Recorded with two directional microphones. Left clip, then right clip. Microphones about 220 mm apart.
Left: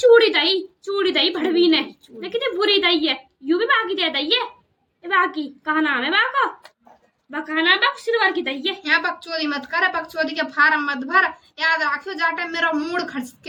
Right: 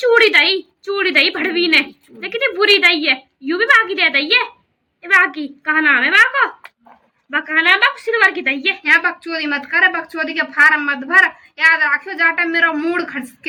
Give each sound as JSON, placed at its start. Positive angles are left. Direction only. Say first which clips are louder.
{"t": 0.1, "sound": "a woman's voice", "louder": "right 3 dB", "side_deg": -10}
{"t": 8.8, "sound": "a woman's voice", "louder": "right 5 dB", "side_deg": 20}